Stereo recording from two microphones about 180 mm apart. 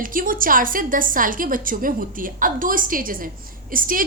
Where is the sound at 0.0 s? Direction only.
50° right (ahead or behind).